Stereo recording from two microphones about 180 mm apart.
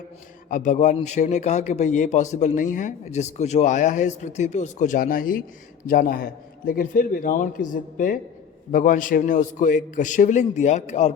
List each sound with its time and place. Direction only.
0.5 s a man's voice: 45° left (ahead or behind)